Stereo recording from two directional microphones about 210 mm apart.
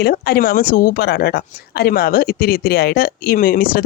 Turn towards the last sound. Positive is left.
turn(degrees=45)  # may be behind; listen again after turning